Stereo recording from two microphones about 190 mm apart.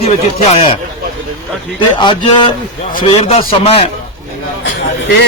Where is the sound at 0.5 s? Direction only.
35° left (ahead or behind).